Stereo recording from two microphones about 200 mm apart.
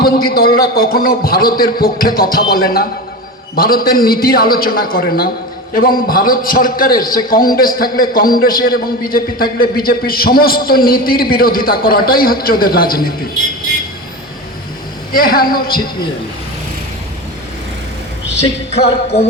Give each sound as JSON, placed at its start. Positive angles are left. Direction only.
{"t": 0.0, "sound": "a man's voice", "side_deg": 50}
{"t": 15.1, "sound": "a man's voice", "side_deg": 45}
{"t": 18.3, "sound": "music", "side_deg": 30}